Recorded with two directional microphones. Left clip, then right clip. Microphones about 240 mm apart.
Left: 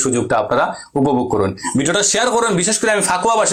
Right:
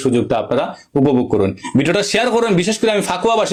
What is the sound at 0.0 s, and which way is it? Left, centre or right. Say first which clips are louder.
A man's voice: even; right.